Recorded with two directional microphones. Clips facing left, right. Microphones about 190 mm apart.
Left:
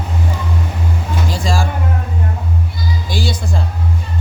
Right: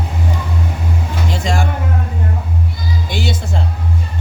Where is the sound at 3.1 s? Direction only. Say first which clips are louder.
Left 1 dB; 25° right (ahead or behind).